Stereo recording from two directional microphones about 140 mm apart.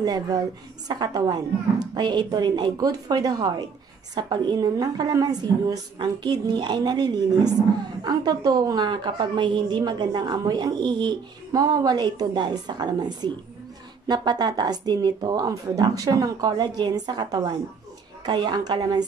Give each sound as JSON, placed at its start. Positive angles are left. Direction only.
{"t": 0.0, "sound": "a woman's voice", "side_deg": -25}